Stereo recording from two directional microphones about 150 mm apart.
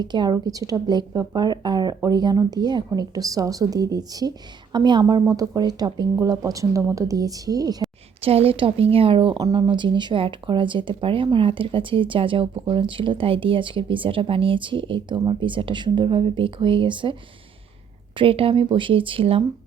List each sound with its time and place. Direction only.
0.0 s speech: 30° right (ahead or behind)
8.2 s speech: 40° right (ahead or behind)
18.2 s speech: 40° right (ahead or behind)